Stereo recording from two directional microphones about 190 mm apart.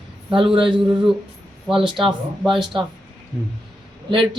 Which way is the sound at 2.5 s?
25° right (ahead or behind).